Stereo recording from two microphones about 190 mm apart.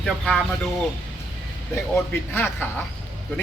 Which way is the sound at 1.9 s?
10° left (ahead or behind).